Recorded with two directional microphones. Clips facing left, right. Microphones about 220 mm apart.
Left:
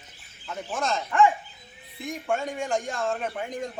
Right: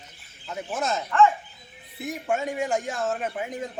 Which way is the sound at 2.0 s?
5° right (ahead or behind).